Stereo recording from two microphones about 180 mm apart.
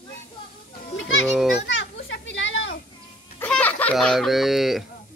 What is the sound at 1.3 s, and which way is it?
Speech, centre (ahead or behind).